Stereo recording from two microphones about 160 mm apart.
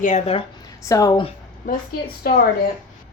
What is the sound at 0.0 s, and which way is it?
Speech, 50° left (ahead or behind).